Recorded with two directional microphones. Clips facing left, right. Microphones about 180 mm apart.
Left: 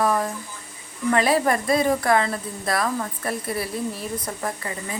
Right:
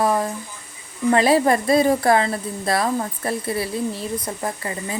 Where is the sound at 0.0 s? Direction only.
25° right (ahead or behind).